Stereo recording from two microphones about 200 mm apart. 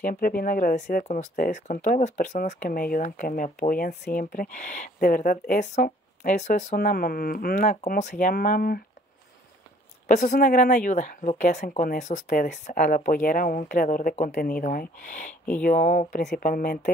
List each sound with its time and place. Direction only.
0.0 s speech: 45° left (ahead or behind)
10.0 s speech: 40° left (ahead or behind)
16.2 s speech: 50° left (ahead or behind)